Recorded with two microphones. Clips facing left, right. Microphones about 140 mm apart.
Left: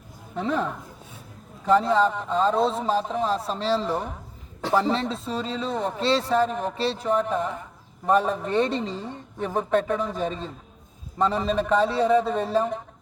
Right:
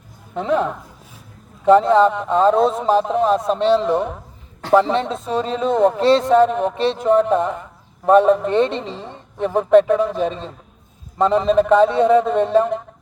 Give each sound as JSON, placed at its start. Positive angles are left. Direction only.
{"t": 0.3, "sound": "a man's voice", "side_deg": -75}
{"t": 5.7, "sound": "a man's voice", "side_deg": -75}
{"t": 11.2, "sound": "a man's voice", "side_deg": -80}